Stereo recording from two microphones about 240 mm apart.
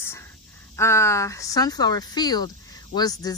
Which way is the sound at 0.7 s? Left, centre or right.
Centre.